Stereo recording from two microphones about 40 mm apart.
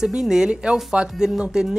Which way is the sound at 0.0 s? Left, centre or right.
Centre.